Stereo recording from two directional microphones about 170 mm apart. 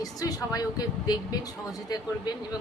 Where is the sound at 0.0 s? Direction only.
20° left (ahead or behind).